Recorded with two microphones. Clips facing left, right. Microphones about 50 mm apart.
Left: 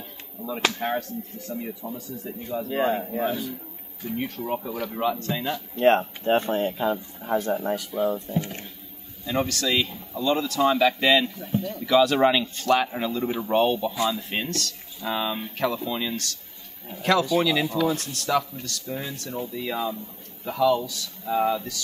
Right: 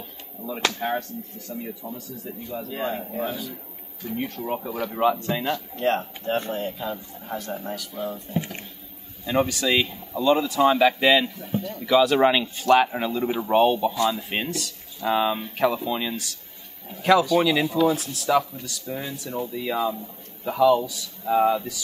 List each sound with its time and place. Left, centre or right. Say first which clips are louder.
0.8 s speech: even; centre
2.6 s speech: left 5 dB; left
4.5 s speech: right 1 dB; centre
5.8 s speech: left 8 dB; left
9.2 s speech: right 3 dB; centre